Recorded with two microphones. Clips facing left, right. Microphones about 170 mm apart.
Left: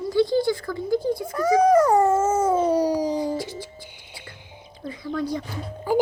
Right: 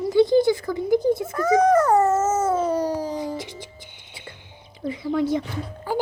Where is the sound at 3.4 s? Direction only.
20° right (ahead or behind).